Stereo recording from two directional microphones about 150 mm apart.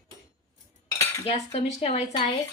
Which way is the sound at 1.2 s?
40° left (ahead or behind).